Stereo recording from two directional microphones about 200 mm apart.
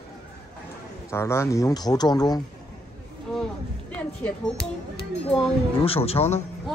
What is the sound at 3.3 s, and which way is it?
Music, 5° left (ahead or behind).